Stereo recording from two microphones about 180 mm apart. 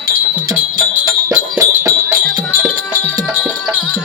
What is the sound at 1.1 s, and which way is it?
Music, 15° right (ahead or behind).